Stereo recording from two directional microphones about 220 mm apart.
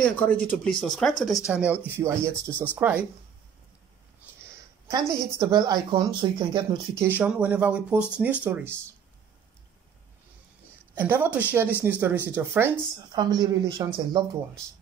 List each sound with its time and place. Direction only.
0.0 s speech: 5° left (ahead or behind)
4.9 s a woman's voice: 15° right (ahead or behind)
7.1 s speech: 5° right (ahead or behind)
11.0 s speech: 10° right (ahead or behind)